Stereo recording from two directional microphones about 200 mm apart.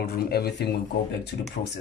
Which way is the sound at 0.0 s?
50° left (ahead or behind).